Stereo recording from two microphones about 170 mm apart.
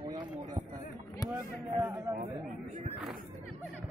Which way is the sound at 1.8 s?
15° right (ahead or behind).